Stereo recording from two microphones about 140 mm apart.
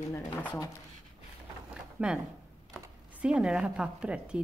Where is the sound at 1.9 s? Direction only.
5° right (ahead or behind).